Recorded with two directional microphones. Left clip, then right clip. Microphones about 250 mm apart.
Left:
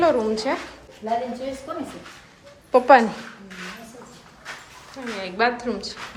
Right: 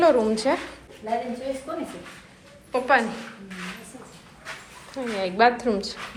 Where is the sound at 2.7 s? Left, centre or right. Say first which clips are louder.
Left 7 dB; left.